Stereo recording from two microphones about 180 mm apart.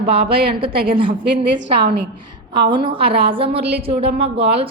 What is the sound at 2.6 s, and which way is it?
A woman's voice, 25° right (ahead or behind).